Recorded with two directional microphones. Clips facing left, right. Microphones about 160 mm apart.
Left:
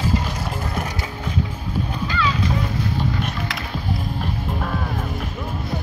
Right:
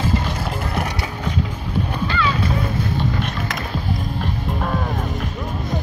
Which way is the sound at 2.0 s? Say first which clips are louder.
Even; 65° right (ahead or behind).